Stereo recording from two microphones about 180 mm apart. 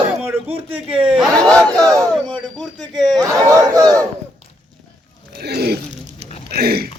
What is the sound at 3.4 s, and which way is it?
Speech, 20° right (ahead or behind).